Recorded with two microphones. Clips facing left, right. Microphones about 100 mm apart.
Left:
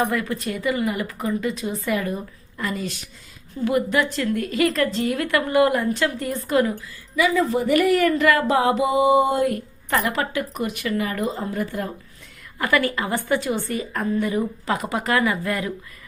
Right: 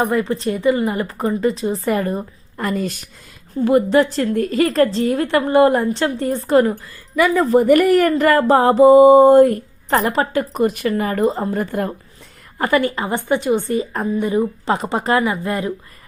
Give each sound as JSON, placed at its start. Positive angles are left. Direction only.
{"t": 0.0, "sound": "speech", "side_deg": -30}
{"t": 3.5, "sound": "speech", "side_deg": -35}
{"t": 7.2, "sound": "speech", "side_deg": -50}
{"t": 12.5, "sound": "speech", "side_deg": -30}